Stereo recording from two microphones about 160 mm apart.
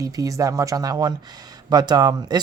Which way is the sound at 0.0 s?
20° right (ahead or behind).